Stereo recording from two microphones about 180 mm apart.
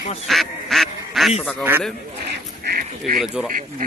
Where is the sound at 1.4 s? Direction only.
10° left (ahead or behind).